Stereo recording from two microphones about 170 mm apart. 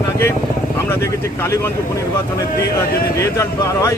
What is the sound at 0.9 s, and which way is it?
Speech, 15° left (ahead or behind).